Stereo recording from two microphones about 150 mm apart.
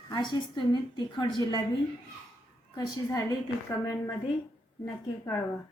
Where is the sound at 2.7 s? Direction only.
25° left (ahead or behind).